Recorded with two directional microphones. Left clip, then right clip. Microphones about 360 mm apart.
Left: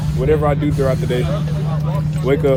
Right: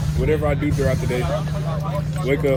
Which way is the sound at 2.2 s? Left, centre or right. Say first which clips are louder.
Left 5 dB; centre.